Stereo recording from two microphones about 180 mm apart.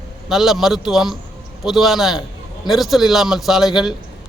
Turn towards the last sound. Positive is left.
turn(degrees=0)  # may be behind; listen again after turning